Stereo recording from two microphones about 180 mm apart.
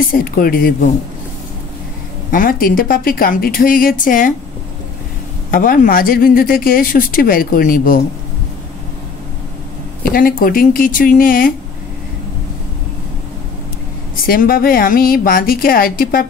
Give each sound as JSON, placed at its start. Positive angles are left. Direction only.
{"t": 0.0, "sound": "speech", "side_deg": 50}
{"t": 2.3, "sound": "speech", "side_deg": 50}
{"t": 5.5, "sound": "speech", "side_deg": 50}
{"t": 10.1, "sound": "speech", "side_deg": 50}
{"t": 14.2, "sound": "speech", "side_deg": 55}